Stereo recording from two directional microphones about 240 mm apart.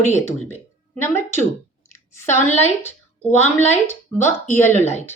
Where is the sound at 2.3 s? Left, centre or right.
Left.